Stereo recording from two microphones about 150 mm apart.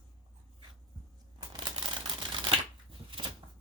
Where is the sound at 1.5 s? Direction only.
30° right (ahead or behind).